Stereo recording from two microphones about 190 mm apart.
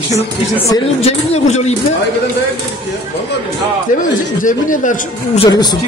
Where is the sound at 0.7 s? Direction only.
35° left (ahead or behind).